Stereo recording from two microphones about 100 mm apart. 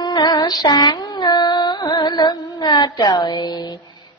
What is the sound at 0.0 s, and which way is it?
Music, 45° left (ahead or behind).